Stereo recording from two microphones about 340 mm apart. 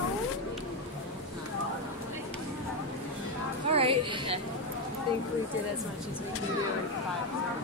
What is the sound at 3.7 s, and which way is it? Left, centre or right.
Music, centre.